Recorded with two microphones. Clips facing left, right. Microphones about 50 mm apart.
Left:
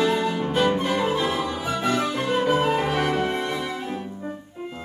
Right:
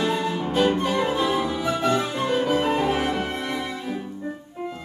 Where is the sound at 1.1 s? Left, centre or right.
Centre.